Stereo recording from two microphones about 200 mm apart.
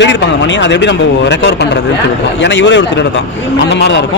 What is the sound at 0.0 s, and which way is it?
Speech, 65° left (ahead or behind).